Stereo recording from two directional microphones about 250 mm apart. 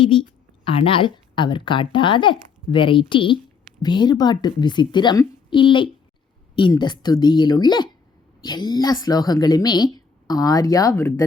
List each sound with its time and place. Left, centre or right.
0.0 s a woman's voice: centre